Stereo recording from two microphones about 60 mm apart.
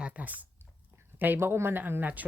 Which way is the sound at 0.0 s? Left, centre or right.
Right.